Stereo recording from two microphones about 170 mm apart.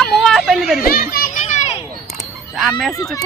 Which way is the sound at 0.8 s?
60° left (ahead or behind).